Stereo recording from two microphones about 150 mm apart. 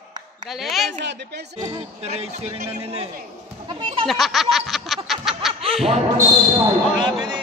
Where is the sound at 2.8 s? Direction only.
40° right (ahead or behind).